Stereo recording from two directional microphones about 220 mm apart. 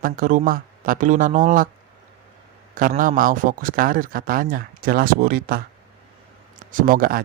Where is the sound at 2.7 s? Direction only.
40° right (ahead or behind).